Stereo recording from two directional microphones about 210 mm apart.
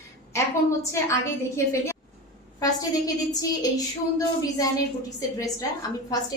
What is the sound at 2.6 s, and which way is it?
A woman's voice, 15° left (ahead or behind).